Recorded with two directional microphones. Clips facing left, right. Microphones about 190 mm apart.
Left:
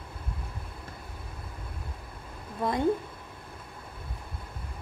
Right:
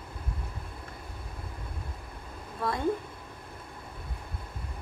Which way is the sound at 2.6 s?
20° left (ahead or behind).